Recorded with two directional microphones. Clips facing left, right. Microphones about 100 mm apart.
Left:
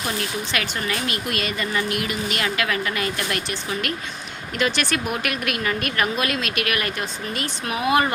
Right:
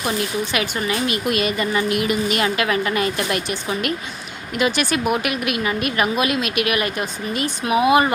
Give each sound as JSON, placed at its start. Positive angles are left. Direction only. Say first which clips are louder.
{"t": 0.5, "sound": "a woman's voice", "louder": "right 4 dB", "side_deg": -15}